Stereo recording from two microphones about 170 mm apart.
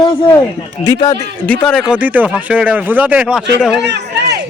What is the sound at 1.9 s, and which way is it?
Speech, 10° right (ahead or behind).